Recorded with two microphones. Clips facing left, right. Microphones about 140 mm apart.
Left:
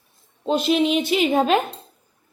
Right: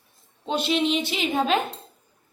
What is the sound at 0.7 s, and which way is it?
Speech, 50° left (ahead or behind).